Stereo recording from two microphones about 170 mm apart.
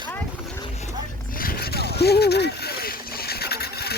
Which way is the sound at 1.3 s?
60° left (ahead or behind).